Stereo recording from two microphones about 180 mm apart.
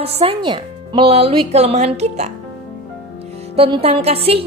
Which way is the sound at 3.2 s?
35° right (ahead or behind).